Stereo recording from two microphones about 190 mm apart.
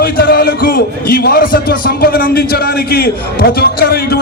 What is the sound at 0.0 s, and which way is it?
A man's voice, 50° left (ahead or behind).